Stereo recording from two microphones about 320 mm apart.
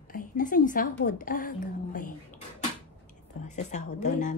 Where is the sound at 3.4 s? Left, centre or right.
Left.